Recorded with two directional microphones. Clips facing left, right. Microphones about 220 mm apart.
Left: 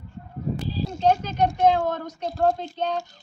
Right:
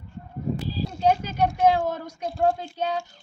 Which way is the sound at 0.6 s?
5° right (ahead or behind).